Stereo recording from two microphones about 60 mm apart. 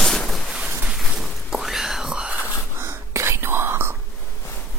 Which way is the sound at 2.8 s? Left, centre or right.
Right.